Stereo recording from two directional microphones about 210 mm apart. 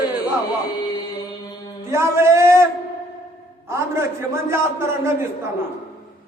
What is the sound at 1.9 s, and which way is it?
A man's voice, 15° right (ahead or behind).